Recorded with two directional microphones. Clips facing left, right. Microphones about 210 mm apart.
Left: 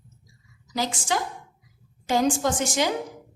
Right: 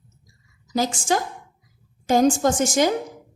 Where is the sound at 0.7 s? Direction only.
45° right (ahead or behind).